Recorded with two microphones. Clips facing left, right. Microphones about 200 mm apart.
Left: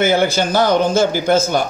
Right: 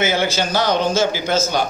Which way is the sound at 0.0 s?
55° left (ahead or behind).